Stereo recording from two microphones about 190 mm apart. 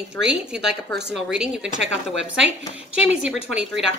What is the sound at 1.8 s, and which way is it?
Speech, 65° right (ahead or behind).